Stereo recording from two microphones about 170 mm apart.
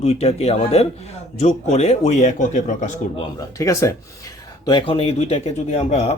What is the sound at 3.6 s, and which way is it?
A man's voice, 20° left (ahead or behind).